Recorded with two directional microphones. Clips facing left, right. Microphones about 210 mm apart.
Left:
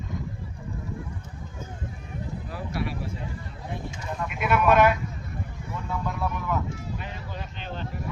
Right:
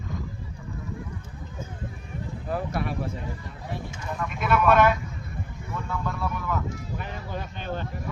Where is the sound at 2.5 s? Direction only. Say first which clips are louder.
Right 4 dB; 50° right (ahead or behind).